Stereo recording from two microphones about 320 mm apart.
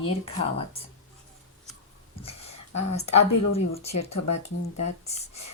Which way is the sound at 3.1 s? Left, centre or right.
Left.